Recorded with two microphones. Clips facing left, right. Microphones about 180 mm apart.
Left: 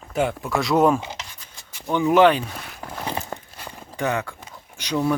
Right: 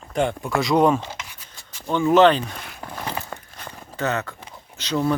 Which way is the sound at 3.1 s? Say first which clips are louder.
Left 3 dB; 20° left (ahead or behind).